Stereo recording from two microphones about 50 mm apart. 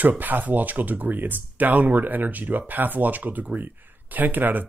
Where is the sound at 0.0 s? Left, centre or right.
Right.